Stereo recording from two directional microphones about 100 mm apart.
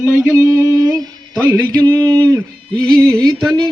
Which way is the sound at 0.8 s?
35° right (ahead or behind).